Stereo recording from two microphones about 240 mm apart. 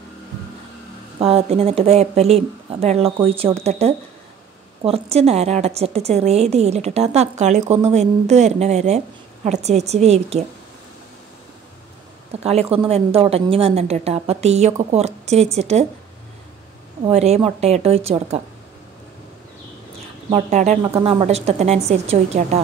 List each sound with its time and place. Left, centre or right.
1.2 s a woman's voice: right
12.3 s a woman's voice: right
17.0 s a woman's voice: right
20.3 s a woman's voice: right
20.8 s a woman's voice: centre